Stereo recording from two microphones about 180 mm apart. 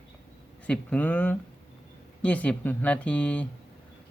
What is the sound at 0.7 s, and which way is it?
Speech, 5° left (ahead or behind).